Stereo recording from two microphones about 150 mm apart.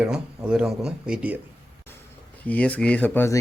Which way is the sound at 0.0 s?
5° right (ahead or behind).